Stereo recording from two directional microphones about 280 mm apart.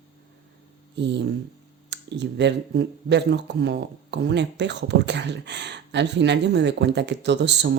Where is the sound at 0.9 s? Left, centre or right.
Right.